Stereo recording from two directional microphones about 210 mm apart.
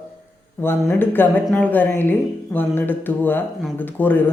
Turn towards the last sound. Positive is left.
turn(degrees=10)  # may be behind; listen again after turning